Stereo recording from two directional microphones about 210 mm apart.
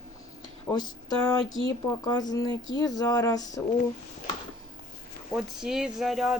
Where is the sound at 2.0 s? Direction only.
15° left (ahead or behind).